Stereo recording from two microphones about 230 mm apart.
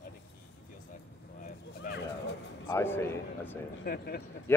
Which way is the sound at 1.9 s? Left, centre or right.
Left.